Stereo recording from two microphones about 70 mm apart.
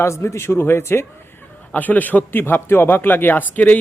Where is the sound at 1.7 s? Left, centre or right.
Left.